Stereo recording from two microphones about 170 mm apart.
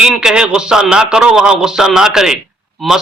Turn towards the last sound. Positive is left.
turn(degrees=-5)  # may be behind; listen again after turning